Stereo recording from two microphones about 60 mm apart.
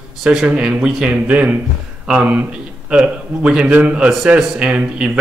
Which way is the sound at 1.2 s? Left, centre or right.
Right.